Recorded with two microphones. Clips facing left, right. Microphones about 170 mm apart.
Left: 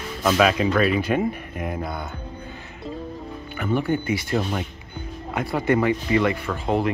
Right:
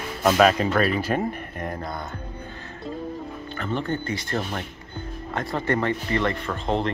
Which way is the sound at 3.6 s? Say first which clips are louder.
Left 4 dB; 10° left (ahead or behind).